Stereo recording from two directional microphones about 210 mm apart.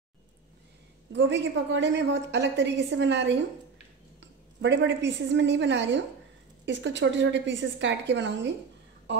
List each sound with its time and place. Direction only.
1.1 s a woman's voice: 60° right (ahead or behind)